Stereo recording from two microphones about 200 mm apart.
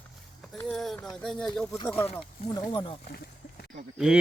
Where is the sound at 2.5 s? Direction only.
25° left (ahead or behind).